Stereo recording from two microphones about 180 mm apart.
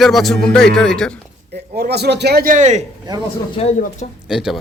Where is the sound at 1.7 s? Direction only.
60° right (ahead or behind); by 2.8 s 40° right (ahead or behind).